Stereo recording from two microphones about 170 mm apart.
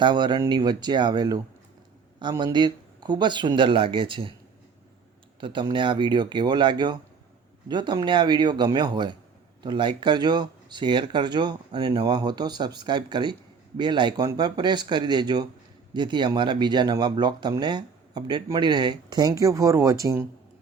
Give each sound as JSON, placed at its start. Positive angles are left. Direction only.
{"t": 0.0, "sound": "speech", "side_deg": -25}
{"t": 5.4, "sound": "speech", "side_deg": -30}